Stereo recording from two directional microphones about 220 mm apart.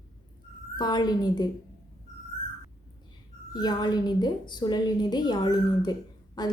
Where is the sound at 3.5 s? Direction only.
20° left (ahead or behind).